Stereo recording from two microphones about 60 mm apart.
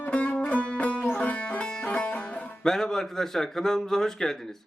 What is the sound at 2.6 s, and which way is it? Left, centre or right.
Speech, centre.